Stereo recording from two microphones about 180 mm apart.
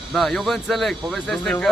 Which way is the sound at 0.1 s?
Centre (ahead or behind).